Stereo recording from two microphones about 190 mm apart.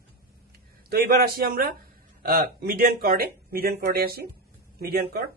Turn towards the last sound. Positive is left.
turn(degrees=-55)  # may be behind; listen again after turning